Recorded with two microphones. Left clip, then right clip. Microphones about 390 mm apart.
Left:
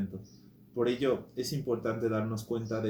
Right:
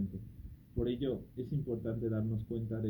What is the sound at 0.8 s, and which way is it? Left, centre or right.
Speech, left.